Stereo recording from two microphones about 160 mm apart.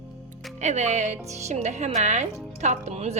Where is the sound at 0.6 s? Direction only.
45° right (ahead or behind).